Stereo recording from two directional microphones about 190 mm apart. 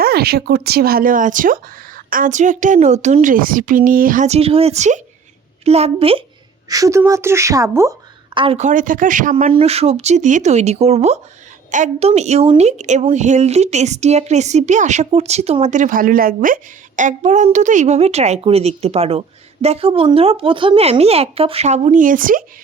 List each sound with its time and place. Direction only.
0.0 s a woman's voice: 55° right (ahead or behind); by 6.2 s 30° right (ahead or behind)
6.7 s a woman's voice: 15° right (ahead or behind)
8.4 s speech: 35° right (ahead or behind)
9.3 s a woman's voice: 30° right (ahead or behind); by 22.4 s 45° right (ahead or behind)